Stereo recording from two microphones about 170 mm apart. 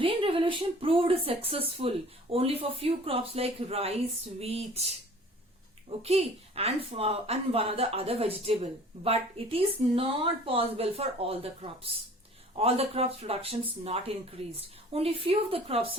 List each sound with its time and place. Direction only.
0.0 s speech: 35° right (ahead or behind)
6.0 s speech: 35° right (ahead or behind)